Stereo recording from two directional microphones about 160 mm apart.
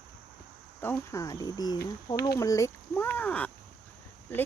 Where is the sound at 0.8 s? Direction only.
15° left (ahead or behind).